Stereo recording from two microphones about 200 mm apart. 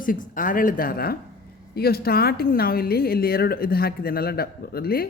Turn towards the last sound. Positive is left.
turn(degrees=50)  # may be behind; listen again after turning